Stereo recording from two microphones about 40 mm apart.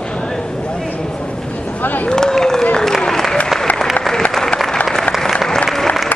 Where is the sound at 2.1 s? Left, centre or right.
Centre.